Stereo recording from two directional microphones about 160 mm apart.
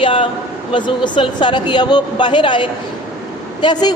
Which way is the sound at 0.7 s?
30° left (ahead or behind).